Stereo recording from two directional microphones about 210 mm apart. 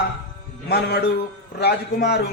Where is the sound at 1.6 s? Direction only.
50° left (ahead or behind).